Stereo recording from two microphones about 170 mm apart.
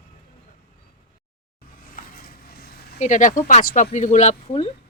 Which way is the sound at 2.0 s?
55° left (ahead or behind).